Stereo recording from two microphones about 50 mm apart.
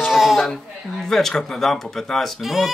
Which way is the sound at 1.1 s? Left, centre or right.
Centre.